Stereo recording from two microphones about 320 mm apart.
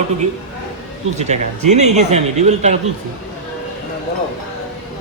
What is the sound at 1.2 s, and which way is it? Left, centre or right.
Speech, right.